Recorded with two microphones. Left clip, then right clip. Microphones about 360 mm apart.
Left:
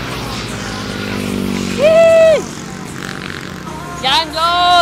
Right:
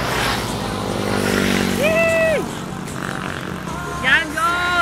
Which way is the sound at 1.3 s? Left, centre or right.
Right.